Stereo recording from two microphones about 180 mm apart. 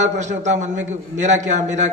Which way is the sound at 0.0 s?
40° right (ahead or behind).